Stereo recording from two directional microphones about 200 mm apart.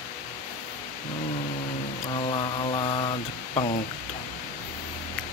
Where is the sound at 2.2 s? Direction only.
25° left (ahead or behind).